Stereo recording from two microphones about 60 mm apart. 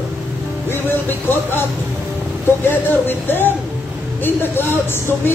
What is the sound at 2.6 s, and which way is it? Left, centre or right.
Speech, left.